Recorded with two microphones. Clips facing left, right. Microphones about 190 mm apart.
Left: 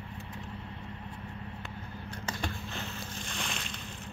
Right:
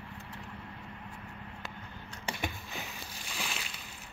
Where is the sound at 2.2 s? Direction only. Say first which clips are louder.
Even; 10° right (ahead or behind).